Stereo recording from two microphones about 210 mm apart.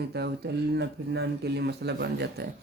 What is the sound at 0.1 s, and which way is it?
Speech, 55° right (ahead or behind).